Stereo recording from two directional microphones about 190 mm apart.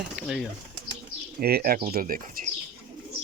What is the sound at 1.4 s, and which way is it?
Speech, 50° right (ahead or behind).